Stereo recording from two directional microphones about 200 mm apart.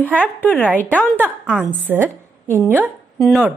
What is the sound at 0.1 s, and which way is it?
Speech, 10° left (ahead or behind).